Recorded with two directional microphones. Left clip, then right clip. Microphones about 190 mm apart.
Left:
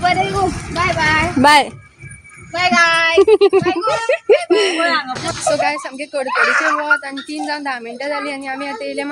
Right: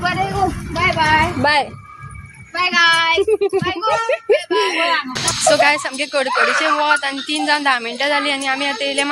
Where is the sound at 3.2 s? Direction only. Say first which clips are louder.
Left 6 dB; 30° left (ahead or behind).